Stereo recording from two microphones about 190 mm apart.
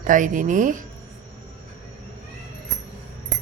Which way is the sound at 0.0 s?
45° right (ahead or behind).